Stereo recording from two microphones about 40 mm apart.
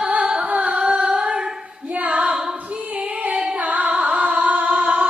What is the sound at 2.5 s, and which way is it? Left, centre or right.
Female singing, right.